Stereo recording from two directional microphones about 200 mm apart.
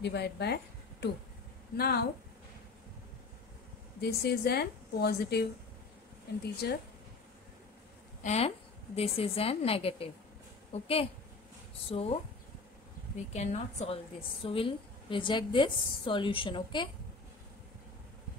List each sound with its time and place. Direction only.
0.0 s speech: 55° left (ahead or behind)
1.8 s a woman's voice: 50° left (ahead or behind)
4.0 s a woman's voice: 55° left (ahead or behind)
8.2 s a woman's voice: 35° left (ahead or behind)
13.3 s a woman's voice: 35° left (ahead or behind)